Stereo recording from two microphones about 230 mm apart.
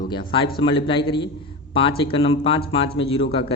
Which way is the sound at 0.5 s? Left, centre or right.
Left.